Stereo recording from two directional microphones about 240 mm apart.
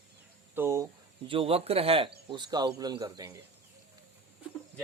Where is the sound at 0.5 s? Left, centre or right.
Centre.